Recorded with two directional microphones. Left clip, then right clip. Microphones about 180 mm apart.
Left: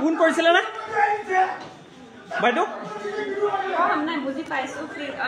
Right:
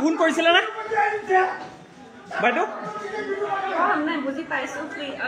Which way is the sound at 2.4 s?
10° left (ahead or behind).